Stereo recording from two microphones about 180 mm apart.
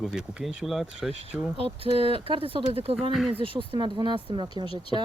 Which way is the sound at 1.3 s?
30° right (ahead or behind).